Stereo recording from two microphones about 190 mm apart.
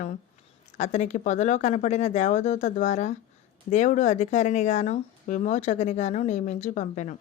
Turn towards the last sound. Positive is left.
turn(degrees=40)  # may be behind; listen again after turning